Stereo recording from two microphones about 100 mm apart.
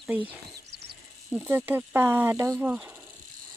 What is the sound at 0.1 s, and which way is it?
Speech, 15° right (ahead or behind).